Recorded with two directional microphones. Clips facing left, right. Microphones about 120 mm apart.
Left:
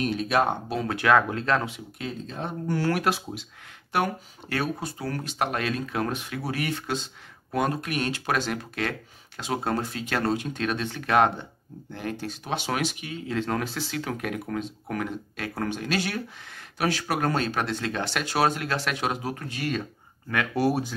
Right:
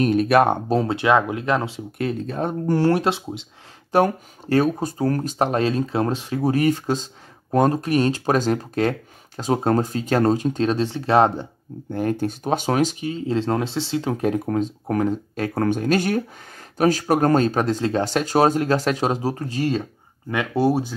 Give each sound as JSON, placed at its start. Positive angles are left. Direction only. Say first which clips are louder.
{"t": 0.0, "sound": "speech", "louder": "right 8 dB", "side_deg": -55}
{"t": 0.8, "sound": "speech", "louder": "even", "side_deg": -25}
{"t": 2.0, "sound": "speech", "louder": "right 10 dB", "side_deg": -60}
{"t": 2.8, "sound": "speech", "louder": "right 5 dB", "side_deg": -25}
{"t": 3.9, "sound": "speech", "louder": "right 8 dB", "side_deg": -40}
{"t": 11.9, "sound": "speech", "louder": "right 10 dB", "side_deg": -45}